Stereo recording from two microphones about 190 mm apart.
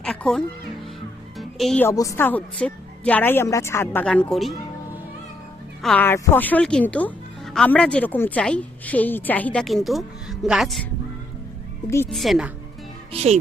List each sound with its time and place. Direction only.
0.0 s a child's voice: 5° left (ahead or behind)
1.4 s music: centre (ahead or behind)
1.9 s speech: 15° left (ahead or behind)
5.8 s speech: 5° left (ahead or behind)
12.1 s speech: centre (ahead or behind)
13.1 s speech: 35° right (ahead or behind)